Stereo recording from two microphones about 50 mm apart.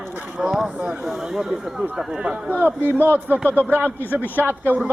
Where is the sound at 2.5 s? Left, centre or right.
Right.